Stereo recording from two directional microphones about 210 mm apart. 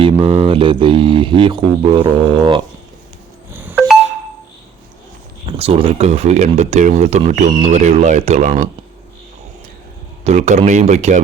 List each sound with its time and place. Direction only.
0.0 s speech: 25° right (ahead or behind)
3.5 s a sound: 10° right (ahead or behind)
5.5 s speech: 25° right (ahead or behind)
10.2 s speech: 35° right (ahead or behind)